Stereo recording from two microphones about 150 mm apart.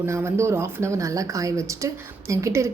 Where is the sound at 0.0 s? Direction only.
15° right (ahead or behind).